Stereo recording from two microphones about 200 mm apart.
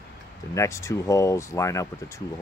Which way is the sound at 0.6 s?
15° left (ahead or behind).